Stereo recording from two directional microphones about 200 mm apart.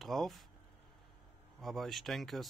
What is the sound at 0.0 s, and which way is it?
Speech, centre (ahead or behind).